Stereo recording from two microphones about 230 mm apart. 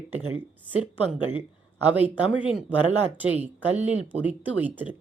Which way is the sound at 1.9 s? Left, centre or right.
Centre.